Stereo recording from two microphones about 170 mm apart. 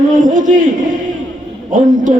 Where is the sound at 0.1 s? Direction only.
50° right (ahead or behind).